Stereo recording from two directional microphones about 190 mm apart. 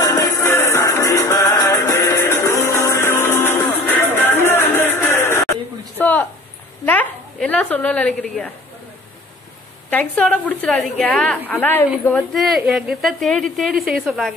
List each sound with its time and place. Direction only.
0.0 s music: 15° left (ahead or behind)
5.9 s a sound: 10° left (ahead or behind)
6.9 s a woman's voice: 5° left (ahead or behind)
9.8 s a woman's voice: 5° left (ahead or behind)